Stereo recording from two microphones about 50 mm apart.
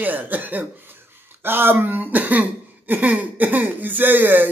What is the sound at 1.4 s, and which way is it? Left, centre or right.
Speech, right.